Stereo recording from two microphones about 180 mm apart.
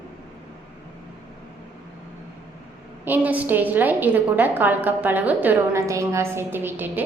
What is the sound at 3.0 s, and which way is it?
A woman's voice, 10° right (ahead or behind).